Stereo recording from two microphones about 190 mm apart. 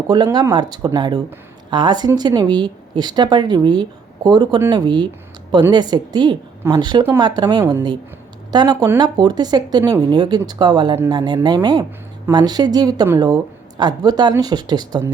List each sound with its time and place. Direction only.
0.1 s speech: 20° right (ahead or behind)